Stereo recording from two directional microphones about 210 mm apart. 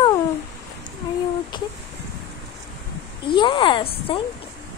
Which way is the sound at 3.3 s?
25° left (ahead or behind).